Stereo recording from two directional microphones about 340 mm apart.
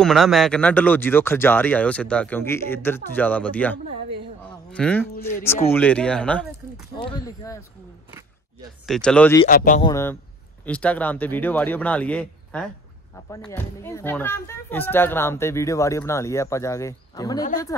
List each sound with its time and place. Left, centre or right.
0.0 s speech: centre
8.8 s speech: centre
9.5 s speech: left
9.8 s speech: centre